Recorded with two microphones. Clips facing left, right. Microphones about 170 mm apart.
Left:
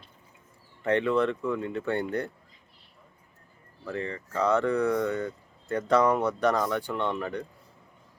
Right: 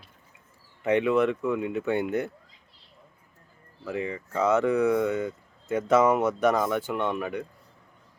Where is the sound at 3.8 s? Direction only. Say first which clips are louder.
Right 2 dB; 10° right (ahead or behind).